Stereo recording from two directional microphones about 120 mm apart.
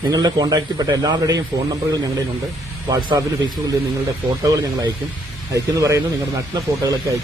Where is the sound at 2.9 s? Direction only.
35° right (ahead or behind).